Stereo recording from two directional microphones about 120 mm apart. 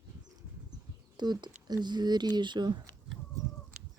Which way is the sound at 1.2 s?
35° right (ahead or behind).